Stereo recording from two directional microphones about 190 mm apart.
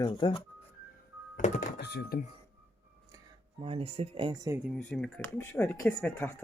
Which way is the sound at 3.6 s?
30° right (ahead or behind).